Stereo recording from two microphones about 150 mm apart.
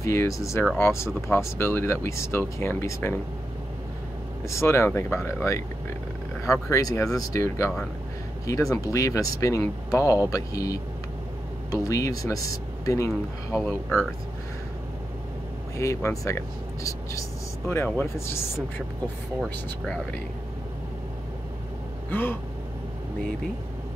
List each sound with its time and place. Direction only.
0.0 s speech: 20° left (ahead or behind)
4.5 s speech: 20° left (ahead or behind)
13.1 s speech: centre (ahead or behind)
15.8 s speech: 20° left (ahead or behind)
19.4 s speech: 5° left (ahead or behind)
22.1 s speech: 15° left (ahead or behind)